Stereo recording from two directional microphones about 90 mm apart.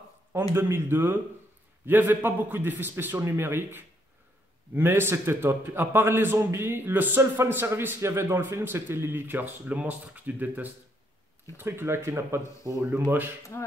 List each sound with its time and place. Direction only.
0.3 s a man's voice: 30° right (ahead or behind)
13.5 s speech: 25° left (ahead or behind)